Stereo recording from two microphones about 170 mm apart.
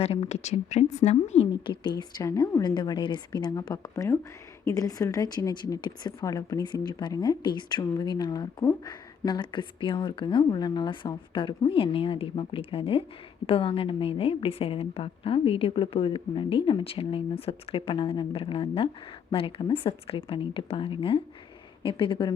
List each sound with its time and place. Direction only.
0.0 s a woman's voice: 35° left (ahead or behind)